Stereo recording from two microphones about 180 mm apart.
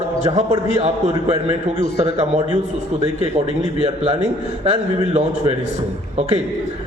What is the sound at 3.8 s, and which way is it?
A man's voice, 35° right (ahead or behind).